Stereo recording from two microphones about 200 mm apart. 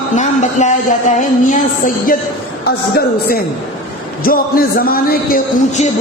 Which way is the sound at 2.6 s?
50° left (ahead or behind).